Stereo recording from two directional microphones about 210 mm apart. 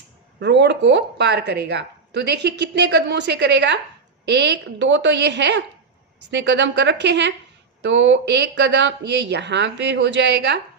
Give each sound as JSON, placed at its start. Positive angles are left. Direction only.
{"t": 0.3, "sound": "speech", "side_deg": -55}